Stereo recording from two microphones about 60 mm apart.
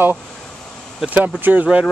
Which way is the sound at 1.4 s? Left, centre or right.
Right.